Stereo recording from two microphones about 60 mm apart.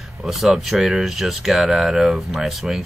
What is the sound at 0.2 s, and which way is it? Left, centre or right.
Speech, centre.